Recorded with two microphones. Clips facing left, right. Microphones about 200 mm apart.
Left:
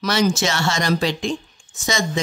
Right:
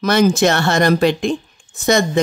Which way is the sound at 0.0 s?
55° right (ahead or behind).